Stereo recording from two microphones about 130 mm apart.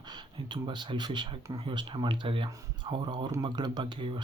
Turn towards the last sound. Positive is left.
turn(degrees=-35)  # may be behind; listen again after turning